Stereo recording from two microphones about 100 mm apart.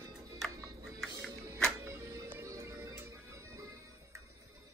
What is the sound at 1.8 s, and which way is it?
Music, 25° right (ahead or behind).